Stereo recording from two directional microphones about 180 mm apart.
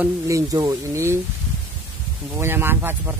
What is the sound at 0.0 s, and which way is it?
Speech, 15° right (ahead or behind).